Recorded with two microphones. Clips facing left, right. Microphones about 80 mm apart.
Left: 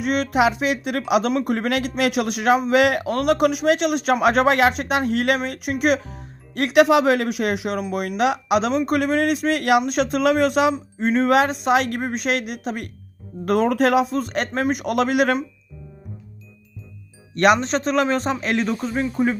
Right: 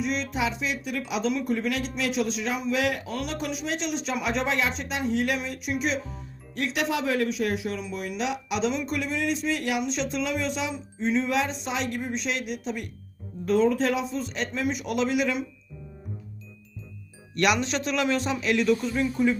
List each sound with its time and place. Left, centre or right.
0.0 s speech: left
13.4 s speech: left
17.3 s a man's voice: left
19.1 s music: left